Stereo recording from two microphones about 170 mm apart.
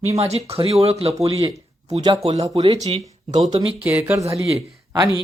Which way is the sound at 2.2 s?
35° right (ahead or behind).